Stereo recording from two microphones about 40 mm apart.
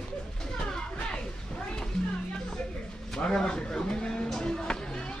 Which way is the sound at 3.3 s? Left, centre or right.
Centre.